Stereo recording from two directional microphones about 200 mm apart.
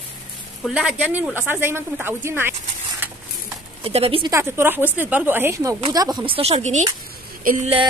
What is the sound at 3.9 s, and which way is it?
Speech, 30° right (ahead or behind).